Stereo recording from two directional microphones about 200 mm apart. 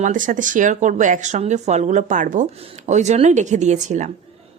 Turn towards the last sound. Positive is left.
turn(degrees=-35)  # may be behind; listen again after turning